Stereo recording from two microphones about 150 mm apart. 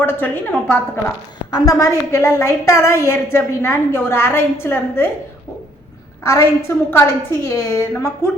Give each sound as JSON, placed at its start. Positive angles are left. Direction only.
{"t": 0.0, "sound": "a woman's voice", "side_deg": 15}
{"t": 6.2, "sound": "a woman's voice", "side_deg": 20}